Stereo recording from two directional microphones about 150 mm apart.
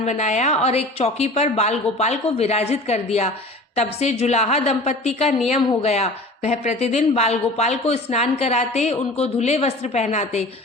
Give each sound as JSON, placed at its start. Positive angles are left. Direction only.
{"t": 0.0, "sound": "speech", "side_deg": 50}